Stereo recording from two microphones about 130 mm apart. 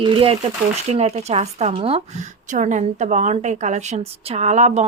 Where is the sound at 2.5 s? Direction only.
70° right (ahead or behind).